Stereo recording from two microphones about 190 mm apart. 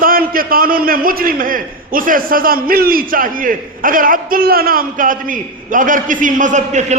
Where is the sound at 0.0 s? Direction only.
50° right (ahead or behind).